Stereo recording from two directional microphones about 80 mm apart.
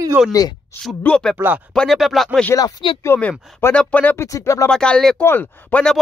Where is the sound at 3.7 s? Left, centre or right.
Centre.